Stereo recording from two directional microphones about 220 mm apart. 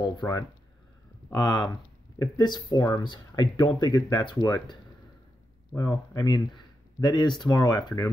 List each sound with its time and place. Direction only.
0.2 s speech: 15° left (ahead or behind)
5.8 s speech: 15° left (ahead or behind)